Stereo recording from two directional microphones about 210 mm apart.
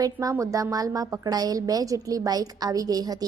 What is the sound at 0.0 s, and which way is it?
A woman's voice, 15° right (ahead or behind).